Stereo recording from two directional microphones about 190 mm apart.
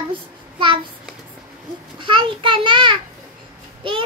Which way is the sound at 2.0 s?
25° right (ahead or behind).